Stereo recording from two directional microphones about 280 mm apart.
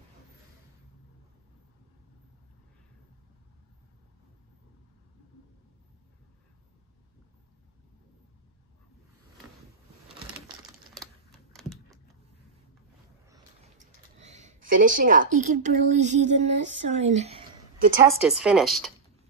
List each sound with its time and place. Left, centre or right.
11.0 s typing: centre
13.7 s a sound: right
16.4 s speech: right
18.0 s speech: centre